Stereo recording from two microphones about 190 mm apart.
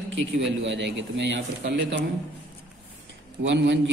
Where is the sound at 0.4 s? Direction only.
70° right (ahead or behind).